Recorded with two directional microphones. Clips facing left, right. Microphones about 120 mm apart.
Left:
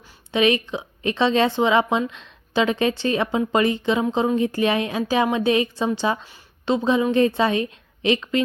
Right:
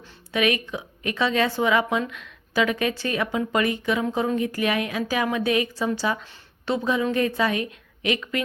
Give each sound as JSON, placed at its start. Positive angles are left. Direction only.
{"t": 0.3, "sound": "a woman's voice", "side_deg": 25}